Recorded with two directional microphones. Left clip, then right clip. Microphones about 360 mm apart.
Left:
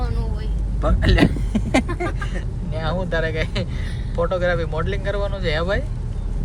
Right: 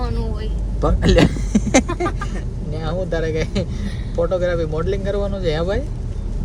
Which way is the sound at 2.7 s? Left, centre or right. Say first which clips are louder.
Even; centre.